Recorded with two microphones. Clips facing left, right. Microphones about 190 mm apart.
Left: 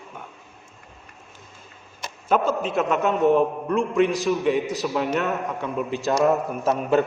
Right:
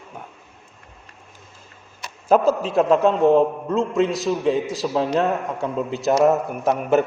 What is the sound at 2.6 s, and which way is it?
A man's voice, 30° right (ahead or behind).